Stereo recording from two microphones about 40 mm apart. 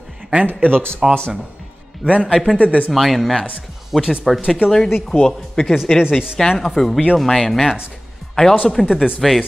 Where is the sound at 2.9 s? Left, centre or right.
Centre.